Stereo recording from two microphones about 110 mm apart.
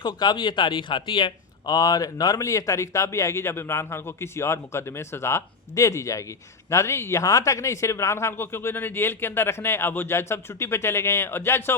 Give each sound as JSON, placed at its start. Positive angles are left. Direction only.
{"t": 0.0, "sound": "speech", "side_deg": 45}